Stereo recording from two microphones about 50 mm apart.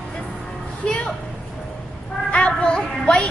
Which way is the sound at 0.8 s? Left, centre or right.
Centre.